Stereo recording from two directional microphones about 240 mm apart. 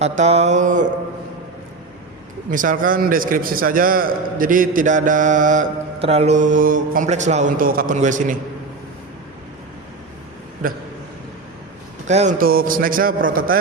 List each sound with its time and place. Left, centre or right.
0.0 s mantra: right
2.5 s a man's voice: right
12.0 s a man's voice: right